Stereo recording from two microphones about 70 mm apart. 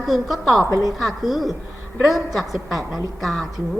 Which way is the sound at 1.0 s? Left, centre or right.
Centre.